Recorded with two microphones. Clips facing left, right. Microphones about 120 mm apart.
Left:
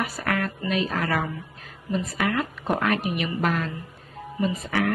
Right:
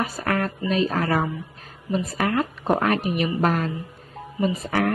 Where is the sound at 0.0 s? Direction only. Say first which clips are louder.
Right 2 dB; 30° right (ahead or behind).